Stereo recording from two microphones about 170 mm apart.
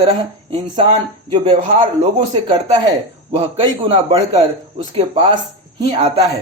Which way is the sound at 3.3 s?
35° right (ahead or behind).